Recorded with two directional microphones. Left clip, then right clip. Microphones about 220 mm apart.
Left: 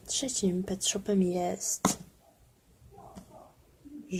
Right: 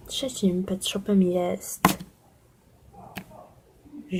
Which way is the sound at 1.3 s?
Centre (ahead or behind).